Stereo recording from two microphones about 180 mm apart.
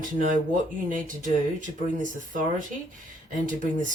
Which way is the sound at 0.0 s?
45° right (ahead or behind).